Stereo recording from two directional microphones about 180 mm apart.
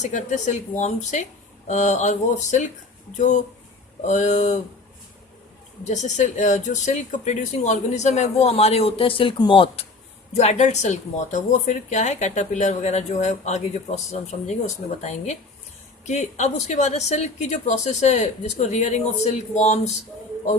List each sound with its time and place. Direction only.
0.0 s a woman's voice: 40° left (ahead or behind)
5.9 s a woman's voice: 40° left (ahead or behind)
16.0 s a woman's voice: 40° left (ahead or behind)